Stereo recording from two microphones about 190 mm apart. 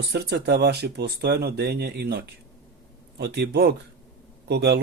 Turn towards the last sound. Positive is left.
turn(degrees=-60)  # may be behind; listen again after turning